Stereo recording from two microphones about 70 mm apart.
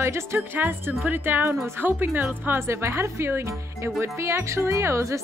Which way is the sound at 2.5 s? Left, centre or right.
Right.